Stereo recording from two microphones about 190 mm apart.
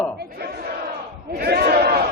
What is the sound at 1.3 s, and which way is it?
Speech, 55° right (ahead or behind).